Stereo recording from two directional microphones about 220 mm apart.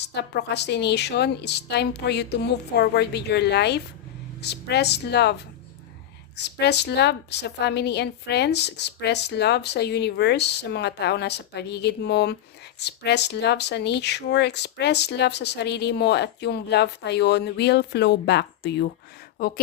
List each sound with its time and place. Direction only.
0.0 s a woman's voice: 50° left (ahead or behind)